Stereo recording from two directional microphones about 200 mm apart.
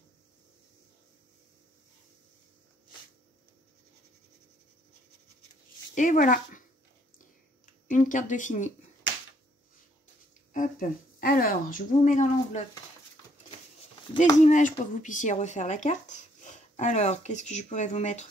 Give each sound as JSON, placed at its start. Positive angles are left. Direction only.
{"t": 5.9, "sound": "speech", "side_deg": 40}
{"t": 7.2, "sound": "a sound", "side_deg": 40}
{"t": 10.5, "sound": "speech", "side_deg": 40}
{"t": 14.4, "sound": "speech", "side_deg": 40}